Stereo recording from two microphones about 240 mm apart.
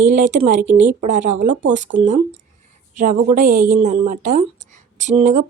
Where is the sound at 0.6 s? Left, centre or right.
Centre.